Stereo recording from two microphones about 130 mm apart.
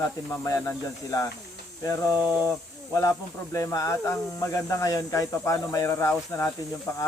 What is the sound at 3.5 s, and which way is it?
Speech, 25° left (ahead or behind).